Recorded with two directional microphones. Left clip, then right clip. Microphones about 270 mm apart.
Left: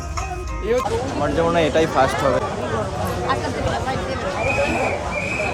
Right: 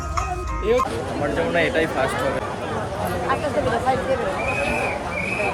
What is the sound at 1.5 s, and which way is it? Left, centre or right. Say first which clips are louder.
Speech: left 2 dB; centre.